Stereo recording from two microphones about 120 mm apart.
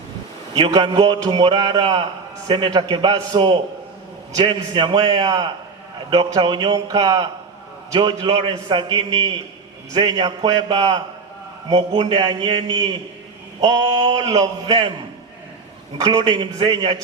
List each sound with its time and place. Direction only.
0.5 s a man's voice: 35° right (ahead or behind)
1.3 s a man's voice: 50° right (ahead or behind); by 7.3 s 30° right (ahead or behind)
7.9 s a man's voice: 40° right (ahead or behind)
11.7 s a man's voice: 40° right (ahead or behind)
16.0 s a man's voice: 40° right (ahead or behind)